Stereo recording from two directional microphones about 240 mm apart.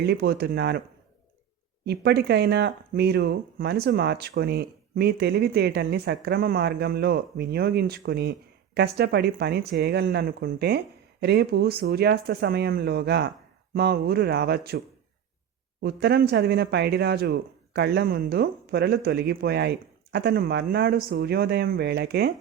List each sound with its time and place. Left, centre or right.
0.0 s speech: right
1.8 s speech: right
15.8 s speech: right